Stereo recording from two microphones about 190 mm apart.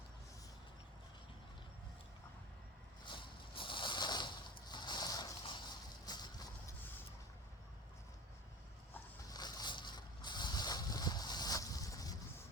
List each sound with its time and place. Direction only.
3.2 s a sound: 25° left (ahead or behind)
6.1 s horse: 20° left (ahead or behind)
9.3 s boat: 20° left (ahead or behind)